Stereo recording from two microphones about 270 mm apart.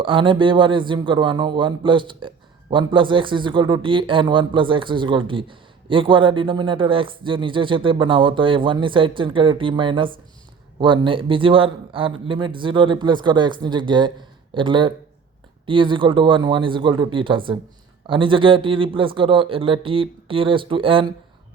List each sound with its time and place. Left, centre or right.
0.0 s a man's voice: centre